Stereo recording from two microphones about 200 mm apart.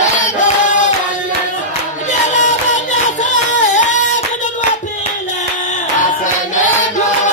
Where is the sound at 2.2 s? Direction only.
40° left (ahead or behind).